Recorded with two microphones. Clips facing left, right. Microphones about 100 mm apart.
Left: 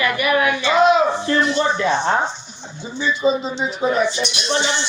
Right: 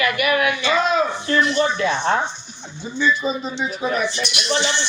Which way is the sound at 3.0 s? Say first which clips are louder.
Left 2 dB; 25° left (ahead or behind).